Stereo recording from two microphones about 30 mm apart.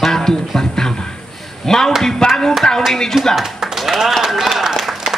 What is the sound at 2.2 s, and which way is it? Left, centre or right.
Speech, left.